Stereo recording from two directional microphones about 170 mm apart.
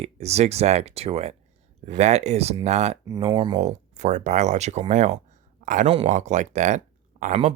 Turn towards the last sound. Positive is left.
turn(degrees=-45)  # may be behind; listen again after turning